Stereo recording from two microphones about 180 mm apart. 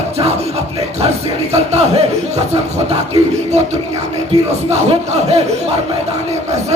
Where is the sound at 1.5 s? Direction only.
35° right (ahead or behind).